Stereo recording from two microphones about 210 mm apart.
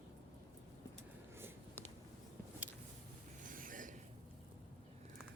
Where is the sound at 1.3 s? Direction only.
10° right (ahead or behind).